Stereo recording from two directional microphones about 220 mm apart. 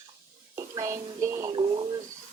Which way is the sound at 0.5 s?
15° right (ahead or behind).